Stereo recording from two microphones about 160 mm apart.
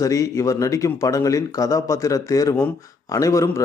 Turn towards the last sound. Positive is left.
turn(degrees=20)  # may be behind; listen again after turning